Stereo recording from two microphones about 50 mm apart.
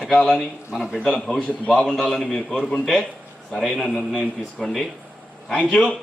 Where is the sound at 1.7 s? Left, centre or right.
Centre.